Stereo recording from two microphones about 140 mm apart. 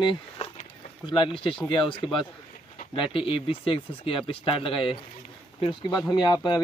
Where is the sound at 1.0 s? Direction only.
35° left (ahead or behind).